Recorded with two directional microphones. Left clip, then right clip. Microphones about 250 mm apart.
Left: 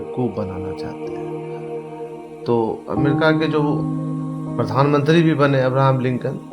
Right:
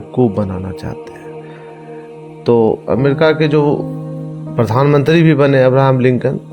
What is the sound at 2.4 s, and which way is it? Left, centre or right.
A man's voice, right.